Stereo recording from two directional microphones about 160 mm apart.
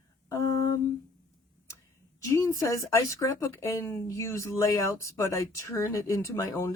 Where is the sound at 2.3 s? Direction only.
20° left (ahead or behind).